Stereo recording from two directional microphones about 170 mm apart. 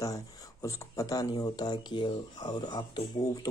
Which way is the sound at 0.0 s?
20° left (ahead or behind).